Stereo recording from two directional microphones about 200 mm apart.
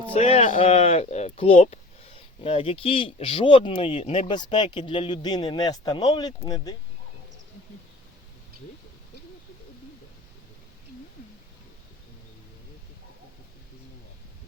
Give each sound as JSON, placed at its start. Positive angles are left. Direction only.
{"t": 0.1, "sound": "speech", "side_deg": 30}
{"t": 4.3, "sound": "speech", "side_deg": 20}